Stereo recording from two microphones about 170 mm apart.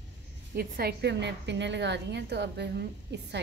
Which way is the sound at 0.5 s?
65° right (ahead or behind).